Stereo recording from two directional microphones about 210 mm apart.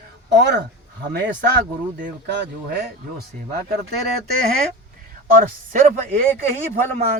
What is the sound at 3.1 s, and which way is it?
Speech, 45° right (ahead or behind).